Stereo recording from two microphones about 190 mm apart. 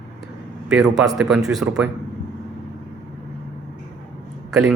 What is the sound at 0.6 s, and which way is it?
A man's voice, 5° right (ahead or behind).